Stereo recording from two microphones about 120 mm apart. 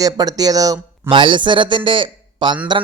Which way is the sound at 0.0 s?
30° right (ahead or behind).